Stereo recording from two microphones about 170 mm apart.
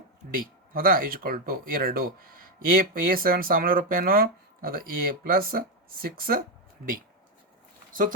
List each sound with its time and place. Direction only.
0.3 s speech: 55° right (ahead or behind)